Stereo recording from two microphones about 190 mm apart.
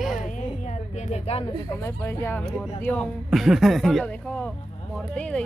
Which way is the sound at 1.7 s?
15° left (ahead or behind).